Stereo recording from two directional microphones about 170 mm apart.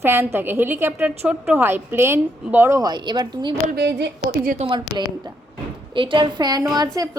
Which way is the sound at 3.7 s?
75° right (ahead or behind).